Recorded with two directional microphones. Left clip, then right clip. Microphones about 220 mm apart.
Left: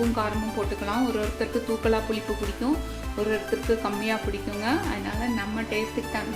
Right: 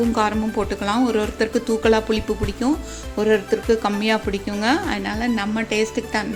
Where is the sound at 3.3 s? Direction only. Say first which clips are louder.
Right 8 dB; 45° right (ahead or behind).